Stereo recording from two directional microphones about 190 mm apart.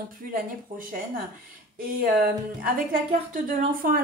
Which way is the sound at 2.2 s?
50° right (ahead or behind).